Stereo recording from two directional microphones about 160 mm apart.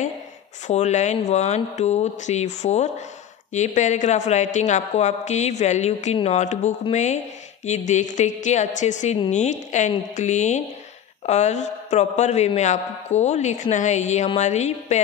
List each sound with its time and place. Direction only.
0.7 s a man's voice: 45° left (ahead or behind)